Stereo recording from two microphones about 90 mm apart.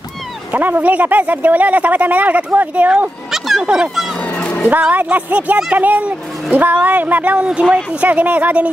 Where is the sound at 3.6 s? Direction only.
10° right (ahead or behind).